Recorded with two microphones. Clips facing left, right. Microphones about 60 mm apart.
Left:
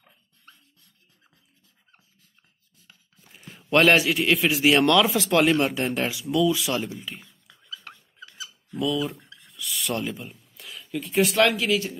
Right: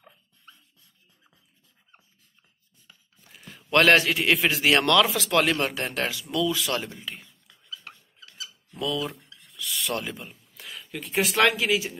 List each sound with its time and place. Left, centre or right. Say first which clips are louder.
3.7 s a man's voice: left 1 dB; centre
5.1 s speech: left 2 dB; left
5.8 s a man's voice: left 3 dB; centre
8.7 s speech: left 3 dB; centre